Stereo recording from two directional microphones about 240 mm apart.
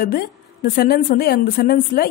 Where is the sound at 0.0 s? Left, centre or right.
Left.